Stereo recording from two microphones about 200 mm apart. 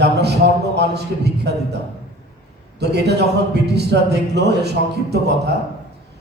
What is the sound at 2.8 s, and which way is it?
Speech, 55° right (ahead or behind).